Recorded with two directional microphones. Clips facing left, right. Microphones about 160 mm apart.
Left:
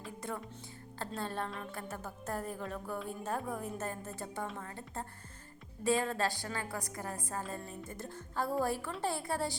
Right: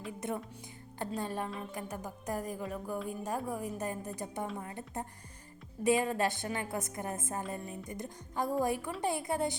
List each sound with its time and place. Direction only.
0.2 s a woman's voice: 20° right (ahead or behind)